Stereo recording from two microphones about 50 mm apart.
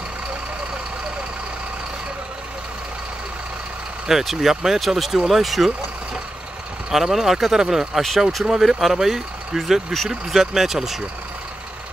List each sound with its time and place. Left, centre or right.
4.1 s speech: centre
6.9 s speech: centre